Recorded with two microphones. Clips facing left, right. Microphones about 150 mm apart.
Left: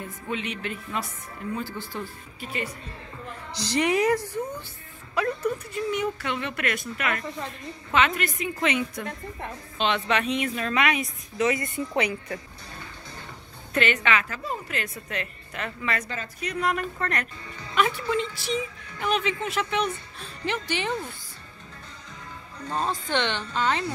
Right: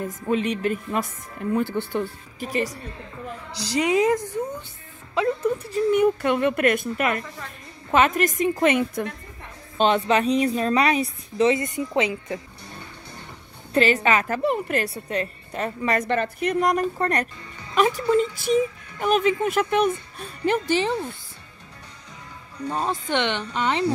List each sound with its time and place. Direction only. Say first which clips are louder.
0.0 s speech: right 8 dB; 40° right (ahead or behind); by 2.0 s 60° right (ahead or behind)
2.4 s speech: right 7 dB; 40° right (ahead or behind)
3.7 s speech: right 2 dB; 20° right (ahead or behind)
5.7 s speech: right 7 dB; 35° right (ahead or behind)
5.9 s speech: right 9 dB; 50° right (ahead or behind)
9.8 s speech: right 6 dB; 40° right (ahead or behind); by 12.4 s 20° right (ahead or behind)
13.7 s speech: right 5 dB; 35° right (ahead or behind)
14.4 s a woman's voice: right 10 dB; 65° right (ahead or behind)
14.8 s speech: right 7 dB; 35° right (ahead or behind)
16.1 s speech: right 11 dB; 60° right (ahead or behind)
20.8 s speech: right 4 dB; 25° right (ahead or behind)
22.7 s speech: right 2 dB; 15° right (ahead or behind)